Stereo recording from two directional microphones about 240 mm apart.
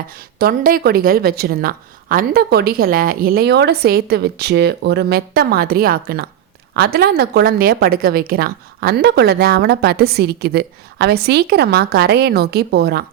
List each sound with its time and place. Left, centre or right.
0.3 s a woman's voice: right